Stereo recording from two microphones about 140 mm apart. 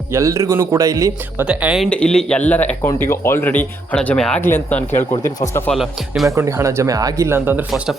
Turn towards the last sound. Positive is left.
turn(degrees=-15)  # may be behind; listen again after turning